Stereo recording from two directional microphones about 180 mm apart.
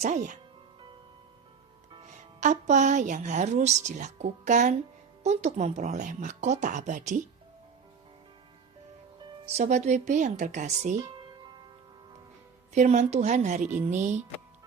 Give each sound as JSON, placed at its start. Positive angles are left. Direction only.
{"t": 0.0, "sound": "speech", "side_deg": -45}
{"t": 2.4, "sound": "speech", "side_deg": -40}
{"t": 9.6, "sound": "speech", "side_deg": -40}
{"t": 12.7, "sound": "speech", "side_deg": -40}